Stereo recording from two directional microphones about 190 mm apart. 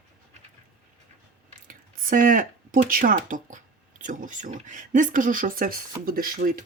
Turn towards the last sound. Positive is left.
turn(degrees=-50)  # may be behind; listen again after turning